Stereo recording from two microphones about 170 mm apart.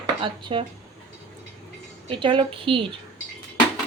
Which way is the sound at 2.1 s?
30° right (ahead or behind).